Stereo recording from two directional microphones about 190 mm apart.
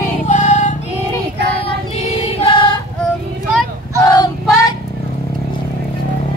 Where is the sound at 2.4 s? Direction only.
25° left (ahead or behind).